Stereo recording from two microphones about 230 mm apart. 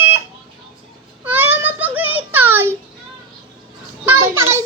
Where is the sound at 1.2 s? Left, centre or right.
Centre.